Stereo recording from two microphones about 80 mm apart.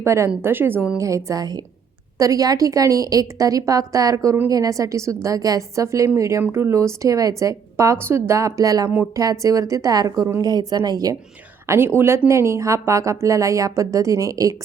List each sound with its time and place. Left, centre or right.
0.0 s a woman's voice: right
0.9 s a woman's voice: right
11.6 s a woman's voice: right